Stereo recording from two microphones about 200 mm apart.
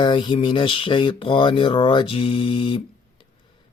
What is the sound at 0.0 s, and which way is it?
Speech, 25° left (ahead or behind).